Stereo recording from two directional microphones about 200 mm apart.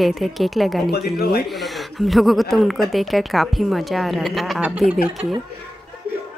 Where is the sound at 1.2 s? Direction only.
50° left (ahead or behind).